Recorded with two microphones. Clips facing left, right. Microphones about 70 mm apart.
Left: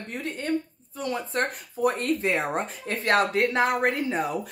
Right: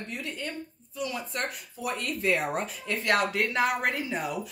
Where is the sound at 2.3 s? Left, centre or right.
Left.